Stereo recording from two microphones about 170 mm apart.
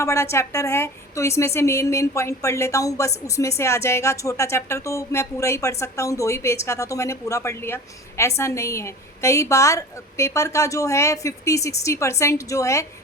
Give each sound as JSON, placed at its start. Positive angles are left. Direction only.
{"t": 0.0, "sound": "speech", "side_deg": 15}